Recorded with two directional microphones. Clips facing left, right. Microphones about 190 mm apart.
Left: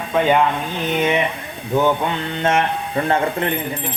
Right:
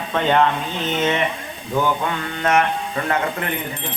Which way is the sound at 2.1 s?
25° left (ahead or behind).